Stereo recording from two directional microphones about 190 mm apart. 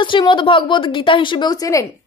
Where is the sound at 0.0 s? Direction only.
25° left (ahead or behind).